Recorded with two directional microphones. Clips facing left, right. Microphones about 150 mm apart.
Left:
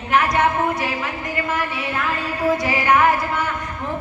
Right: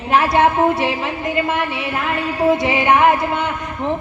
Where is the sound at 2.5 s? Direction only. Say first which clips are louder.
Right 3 dB; 25° right (ahead or behind).